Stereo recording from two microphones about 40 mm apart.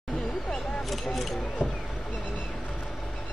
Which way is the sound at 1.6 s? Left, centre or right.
Left.